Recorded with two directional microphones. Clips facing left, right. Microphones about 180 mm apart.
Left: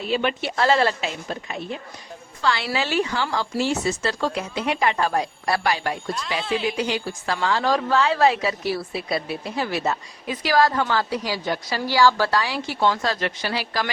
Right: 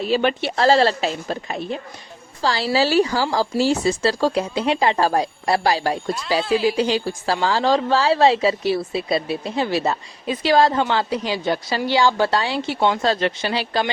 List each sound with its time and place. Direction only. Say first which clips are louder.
0.1 s a woman's voice: right 3 dB; 35° right (ahead or behind)